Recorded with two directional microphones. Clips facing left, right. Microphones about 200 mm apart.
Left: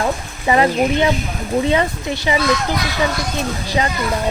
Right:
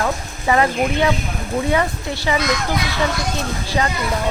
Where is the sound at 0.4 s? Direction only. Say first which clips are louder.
Left 2 dB; 20° left (ahead or behind).